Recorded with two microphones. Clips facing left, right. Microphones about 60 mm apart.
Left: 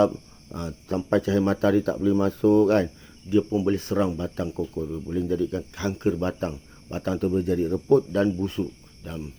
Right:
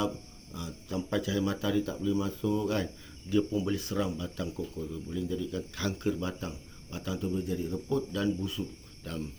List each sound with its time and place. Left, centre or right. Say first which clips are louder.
0.5 s speech: left 7 dB; left
2.8 s speech: left 6 dB; left
3.7 s speech: left 8 dB; left
5.5 s speech: left 5 dB; left
6.1 s speech: left 10 dB; left
7.2 s speech: left 9 dB; left
9.0 s speech: left 2 dB; centre